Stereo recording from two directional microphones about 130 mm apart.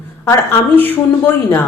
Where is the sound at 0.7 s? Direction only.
15° left (ahead or behind).